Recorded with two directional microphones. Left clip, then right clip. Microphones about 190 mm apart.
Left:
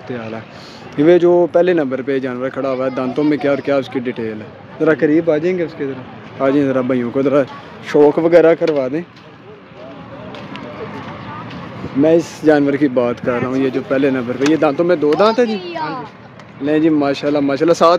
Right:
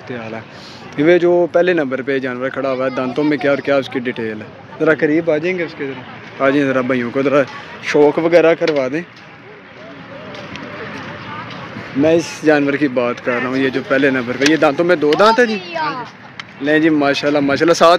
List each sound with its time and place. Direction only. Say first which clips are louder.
0.9 s speech: left 1 dB; 25° left (ahead or behind)
1.3 s speech: left 1 dB; 10° left (ahead or behind)
1.6 s speech: even; 20° left (ahead or behind)
6.4 s speech: even; 10° left (ahead or behind)
12.0 s speech: left 1 dB; 15° left (ahead or behind)
13.3 s speech: even; 5° left (ahead or behind)
16.6 s speech: right 1 dB; centre (ahead or behind)